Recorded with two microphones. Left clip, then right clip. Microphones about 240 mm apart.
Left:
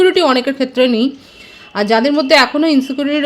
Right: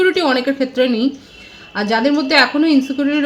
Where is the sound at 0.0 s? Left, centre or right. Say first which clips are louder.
Left 3 dB; left.